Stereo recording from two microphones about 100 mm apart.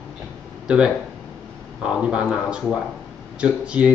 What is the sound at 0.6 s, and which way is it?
A man's voice, 10° right (ahead or behind).